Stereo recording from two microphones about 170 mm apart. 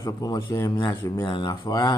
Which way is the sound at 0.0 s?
25° left (ahead or behind).